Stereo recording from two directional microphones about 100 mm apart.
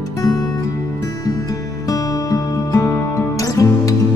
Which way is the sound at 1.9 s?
35° left (ahead or behind).